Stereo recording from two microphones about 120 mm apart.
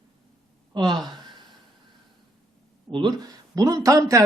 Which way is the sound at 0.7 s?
40° right (ahead or behind).